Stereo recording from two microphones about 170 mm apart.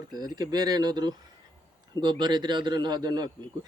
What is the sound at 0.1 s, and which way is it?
Speech, 25° right (ahead or behind).